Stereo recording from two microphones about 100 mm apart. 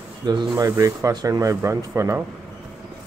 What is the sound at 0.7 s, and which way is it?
Speech, 35° right (ahead or behind).